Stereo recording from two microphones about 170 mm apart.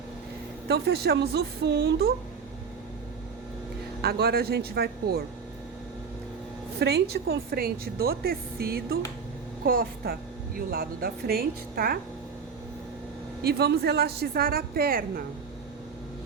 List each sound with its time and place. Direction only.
0.7 s speech: 75° right (ahead or behind)
4.0 s speech: 65° right (ahead or behind)
6.7 s speech: 75° right (ahead or behind)
13.4 s speech: 70° right (ahead or behind)